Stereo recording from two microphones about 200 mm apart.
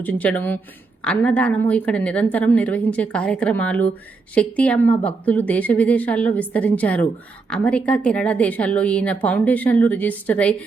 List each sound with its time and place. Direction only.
0.0 s a woman's voice: 5° left (ahead or behind)